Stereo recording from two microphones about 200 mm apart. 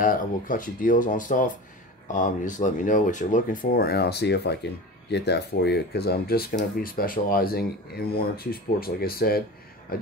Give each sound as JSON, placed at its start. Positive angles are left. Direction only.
{"t": 0.0, "sound": "speech", "side_deg": 45}